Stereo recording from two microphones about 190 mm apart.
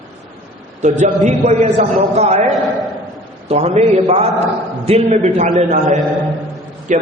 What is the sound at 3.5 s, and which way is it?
A man's voice, 35° right (ahead or behind).